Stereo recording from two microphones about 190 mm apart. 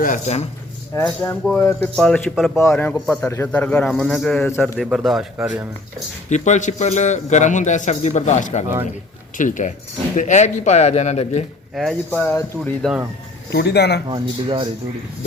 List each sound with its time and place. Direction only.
0.0 s a man's voice: 40° left (ahead or behind)
0.9 s a man's voice: 10° left (ahead or behind)
6.3 s a man's voice: 40° left (ahead or behind)
11.7 s speech: centre (ahead or behind)
12.8 s a man's voice: 5° right (ahead or behind)
13.5 s speech: 60° left (ahead or behind)
14.1 s speech: 25° right (ahead or behind)